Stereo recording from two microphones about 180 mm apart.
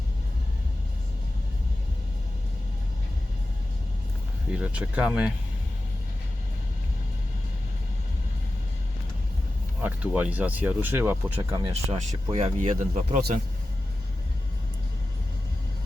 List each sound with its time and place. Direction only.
4.5 s speech: 5° right (ahead or behind)
9.8 s speech: 10° right (ahead or behind)
11.6 s speech: 35° right (ahead or behind)